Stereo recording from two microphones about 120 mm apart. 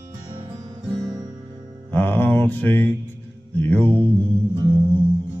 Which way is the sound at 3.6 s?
15° left (ahead or behind).